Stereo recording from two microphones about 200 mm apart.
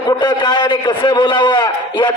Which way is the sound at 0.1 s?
20° left (ahead or behind).